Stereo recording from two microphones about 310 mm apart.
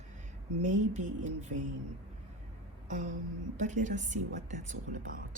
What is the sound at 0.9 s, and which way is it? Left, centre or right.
Speech, right.